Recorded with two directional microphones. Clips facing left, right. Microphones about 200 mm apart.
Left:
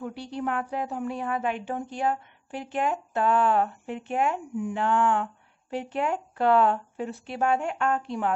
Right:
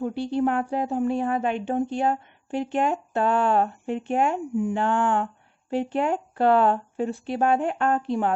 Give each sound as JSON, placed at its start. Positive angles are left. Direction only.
{"t": 0.0, "sound": "speech", "side_deg": -30}